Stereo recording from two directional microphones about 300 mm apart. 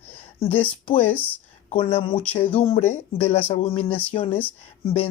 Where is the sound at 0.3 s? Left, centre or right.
Centre.